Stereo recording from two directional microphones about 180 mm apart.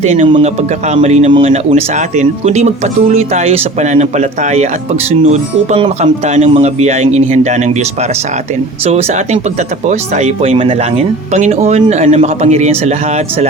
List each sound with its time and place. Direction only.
0.0 s speech: 40° right (ahead or behind)